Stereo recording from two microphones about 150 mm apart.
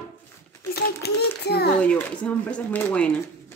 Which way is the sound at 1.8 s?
10° left (ahead or behind).